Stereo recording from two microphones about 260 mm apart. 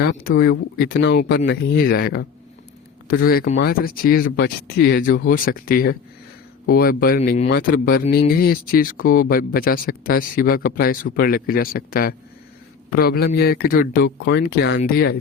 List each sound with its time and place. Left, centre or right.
0.0 s speech: left